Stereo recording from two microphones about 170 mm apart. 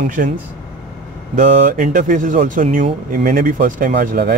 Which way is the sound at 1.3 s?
45° right (ahead or behind).